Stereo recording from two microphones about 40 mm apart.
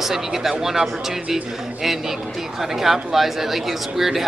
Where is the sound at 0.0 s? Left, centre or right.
Centre.